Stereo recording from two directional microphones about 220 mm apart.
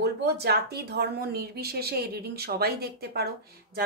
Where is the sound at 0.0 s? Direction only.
50° right (ahead or behind).